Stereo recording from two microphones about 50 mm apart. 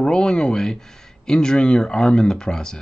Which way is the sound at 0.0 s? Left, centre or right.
Centre.